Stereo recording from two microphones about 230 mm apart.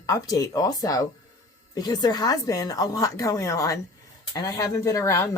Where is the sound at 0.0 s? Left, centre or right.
Centre.